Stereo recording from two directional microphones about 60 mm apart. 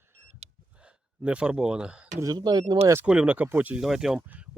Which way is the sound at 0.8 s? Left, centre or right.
Centre.